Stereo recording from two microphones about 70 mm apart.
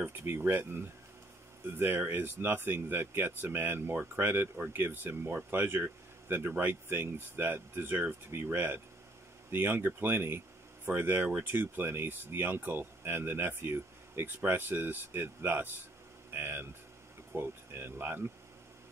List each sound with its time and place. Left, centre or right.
0.0 s speech: right